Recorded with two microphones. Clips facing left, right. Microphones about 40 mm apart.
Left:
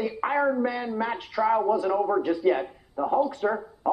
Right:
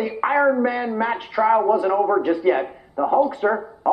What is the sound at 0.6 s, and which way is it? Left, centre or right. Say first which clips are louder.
A man's voice: right 6 dB; right.